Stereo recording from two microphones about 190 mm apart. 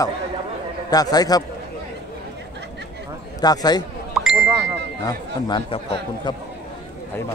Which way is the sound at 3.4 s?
20° left (ahead or behind).